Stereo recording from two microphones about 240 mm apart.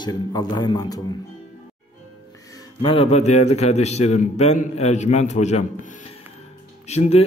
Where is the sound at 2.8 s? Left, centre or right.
Left.